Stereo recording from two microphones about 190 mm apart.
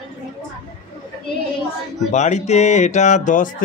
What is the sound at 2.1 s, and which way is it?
Speech, 40° left (ahead or behind).